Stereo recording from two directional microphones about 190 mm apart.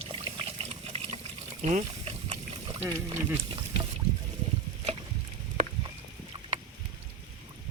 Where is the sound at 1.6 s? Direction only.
35° right (ahead or behind).